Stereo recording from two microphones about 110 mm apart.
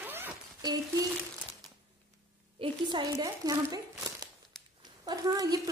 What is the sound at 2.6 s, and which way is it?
A woman's voice, 45° right (ahead or behind).